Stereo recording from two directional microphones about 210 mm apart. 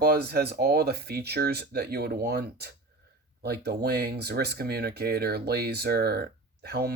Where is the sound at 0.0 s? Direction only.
50° right (ahead or behind).